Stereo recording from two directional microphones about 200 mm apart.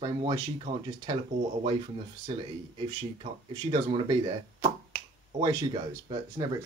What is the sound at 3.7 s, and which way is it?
Speech, 25° right (ahead or behind).